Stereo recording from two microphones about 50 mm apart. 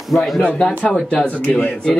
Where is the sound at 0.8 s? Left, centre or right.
Centre.